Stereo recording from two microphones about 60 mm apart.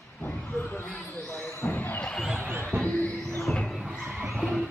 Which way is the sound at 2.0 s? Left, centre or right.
Centre.